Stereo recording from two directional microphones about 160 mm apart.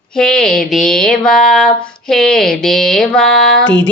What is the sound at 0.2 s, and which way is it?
Music, 5° left (ahead or behind).